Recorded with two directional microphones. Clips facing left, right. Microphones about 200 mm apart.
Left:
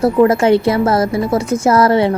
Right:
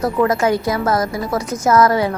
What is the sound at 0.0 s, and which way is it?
A woman's voice, 30° left (ahead or behind).